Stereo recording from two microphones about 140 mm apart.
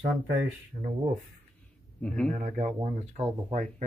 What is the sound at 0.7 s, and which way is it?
Speech, 65° right (ahead or behind).